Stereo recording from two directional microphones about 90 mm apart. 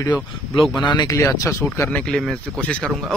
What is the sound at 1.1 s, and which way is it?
Speech, 35° left (ahead or behind).